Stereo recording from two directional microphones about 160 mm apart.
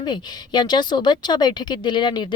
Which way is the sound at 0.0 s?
30° left (ahead or behind).